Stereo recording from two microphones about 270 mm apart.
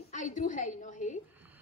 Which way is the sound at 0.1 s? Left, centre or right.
Left.